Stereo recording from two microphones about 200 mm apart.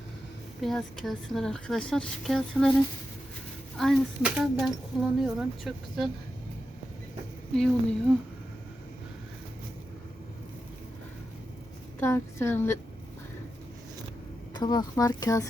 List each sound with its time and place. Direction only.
0.6 s speech: centre (ahead or behind)
3.8 s speech: centre (ahead or behind)
7.5 s speech: 5° left (ahead or behind)
11.9 s a woman's voice: 10° left (ahead or behind)
14.5 s speech: 20° left (ahead or behind)